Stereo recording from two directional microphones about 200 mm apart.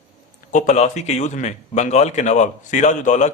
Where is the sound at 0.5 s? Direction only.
40° left (ahead or behind).